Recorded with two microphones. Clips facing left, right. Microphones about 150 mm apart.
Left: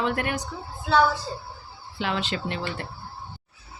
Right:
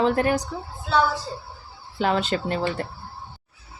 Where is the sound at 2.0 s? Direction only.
40° right (ahead or behind).